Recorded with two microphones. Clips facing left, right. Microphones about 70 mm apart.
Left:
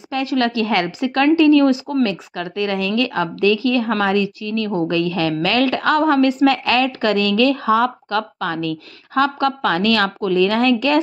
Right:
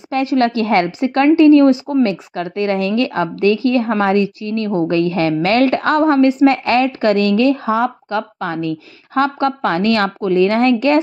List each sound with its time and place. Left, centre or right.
0.1 s a woman's voice: right